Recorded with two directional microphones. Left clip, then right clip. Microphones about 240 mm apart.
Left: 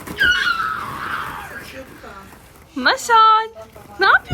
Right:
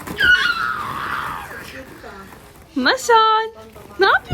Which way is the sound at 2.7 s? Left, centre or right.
Centre.